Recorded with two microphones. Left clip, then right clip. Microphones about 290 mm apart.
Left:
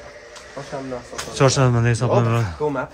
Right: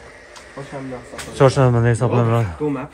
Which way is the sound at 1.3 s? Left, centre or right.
Centre.